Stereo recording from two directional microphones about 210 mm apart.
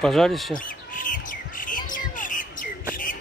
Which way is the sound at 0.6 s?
40° left (ahead or behind).